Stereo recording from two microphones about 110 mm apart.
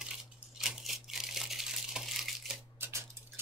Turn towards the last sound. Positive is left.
turn(degrees=-25)  # may be behind; listen again after turning